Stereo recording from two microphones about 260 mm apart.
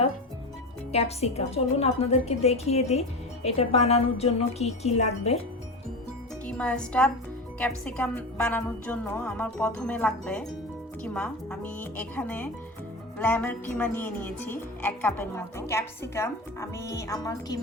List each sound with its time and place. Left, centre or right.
0.9 s a woman's voice: left
6.4 s speech: centre